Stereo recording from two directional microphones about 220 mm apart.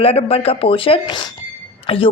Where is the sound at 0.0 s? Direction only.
25° left (ahead or behind).